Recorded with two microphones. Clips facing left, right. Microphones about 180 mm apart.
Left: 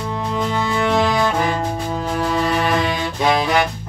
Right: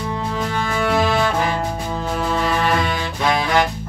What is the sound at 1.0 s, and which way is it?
Music, 15° left (ahead or behind).